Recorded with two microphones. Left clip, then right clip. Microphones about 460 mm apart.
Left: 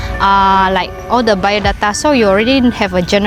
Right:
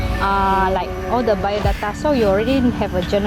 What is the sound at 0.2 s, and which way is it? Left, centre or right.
Speech, left.